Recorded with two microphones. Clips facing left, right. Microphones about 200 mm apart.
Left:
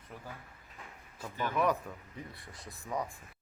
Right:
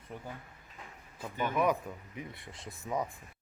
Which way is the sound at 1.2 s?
20° right (ahead or behind).